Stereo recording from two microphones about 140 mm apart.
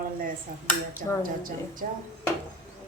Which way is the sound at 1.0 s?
90° right.